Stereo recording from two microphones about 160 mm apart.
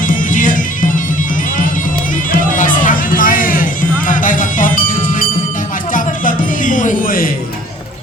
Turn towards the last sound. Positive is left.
turn(degrees=60)  # may be behind; listen again after turning